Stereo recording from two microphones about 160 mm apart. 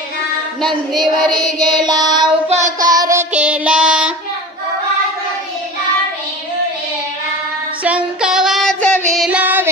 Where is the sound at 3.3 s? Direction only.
5° right (ahead or behind).